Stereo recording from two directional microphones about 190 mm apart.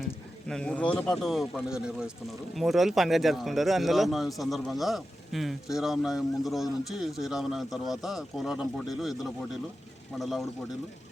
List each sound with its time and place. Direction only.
0.0 s a man's voice: 5° left (ahead or behind)